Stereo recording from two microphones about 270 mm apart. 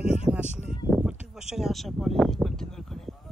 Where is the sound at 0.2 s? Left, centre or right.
Centre.